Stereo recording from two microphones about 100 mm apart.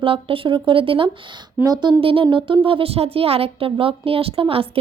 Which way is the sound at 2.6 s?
70° right (ahead or behind).